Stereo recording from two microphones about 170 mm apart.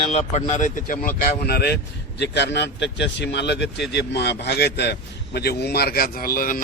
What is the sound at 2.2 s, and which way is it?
Speech, 85° left.